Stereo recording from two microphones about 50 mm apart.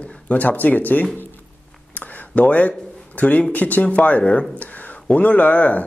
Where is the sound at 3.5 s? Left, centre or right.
Left.